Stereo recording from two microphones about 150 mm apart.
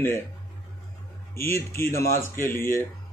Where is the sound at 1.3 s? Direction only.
15° left (ahead or behind).